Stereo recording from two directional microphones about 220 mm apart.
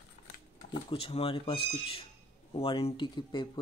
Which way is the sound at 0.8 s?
25° left (ahead or behind).